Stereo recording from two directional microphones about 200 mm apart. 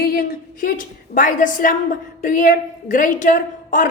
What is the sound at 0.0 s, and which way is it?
A woman's voice, 50° left (ahead or behind).